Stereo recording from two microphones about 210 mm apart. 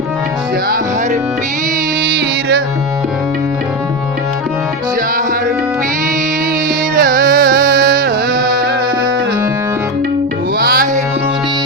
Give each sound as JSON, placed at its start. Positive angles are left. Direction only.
{"t": 6.9, "sound": "music", "side_deg": -45}
{"t": 10.6, "sound": "music", "side_deg": -45}